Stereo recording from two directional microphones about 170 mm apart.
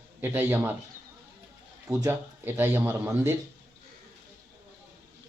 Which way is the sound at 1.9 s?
15° right (ahead or behind).